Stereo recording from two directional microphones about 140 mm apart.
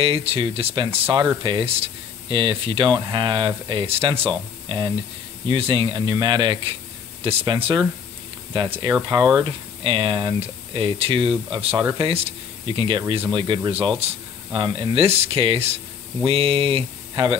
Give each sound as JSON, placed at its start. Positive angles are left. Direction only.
{"t": 0.0, "sound": "speech", "side_deg": -45}
{"t": 8.5, "sound": "speech", "side_deg": -35}